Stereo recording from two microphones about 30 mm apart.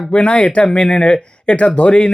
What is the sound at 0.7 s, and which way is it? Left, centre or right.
Speech, left.